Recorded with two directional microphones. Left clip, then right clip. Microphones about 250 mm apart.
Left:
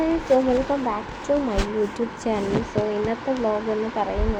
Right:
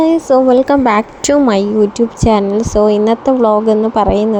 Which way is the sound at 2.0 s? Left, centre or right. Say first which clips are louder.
Right 13 dB; right.